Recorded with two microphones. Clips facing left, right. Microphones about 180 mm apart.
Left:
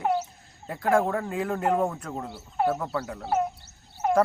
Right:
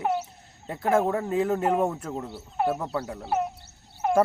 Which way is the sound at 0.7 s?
25° right (ahead or behind).